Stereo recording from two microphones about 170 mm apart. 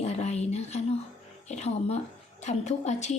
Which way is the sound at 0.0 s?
40° left (ahead or behind).